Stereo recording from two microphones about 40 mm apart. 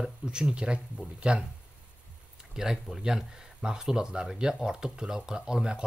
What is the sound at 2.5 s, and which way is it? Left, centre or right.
Speech, centre.